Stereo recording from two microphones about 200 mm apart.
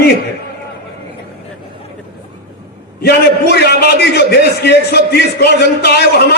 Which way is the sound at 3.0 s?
55° left (ahead or behind).